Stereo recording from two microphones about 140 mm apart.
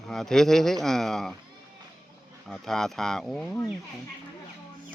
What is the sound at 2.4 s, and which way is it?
Speech, 5° left (ahead or behind).